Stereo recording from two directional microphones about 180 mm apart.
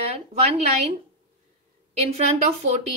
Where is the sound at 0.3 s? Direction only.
35° right (ahead or behind).